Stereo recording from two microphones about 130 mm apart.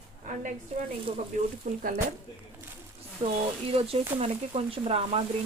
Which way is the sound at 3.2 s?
45° right (ahead or behind).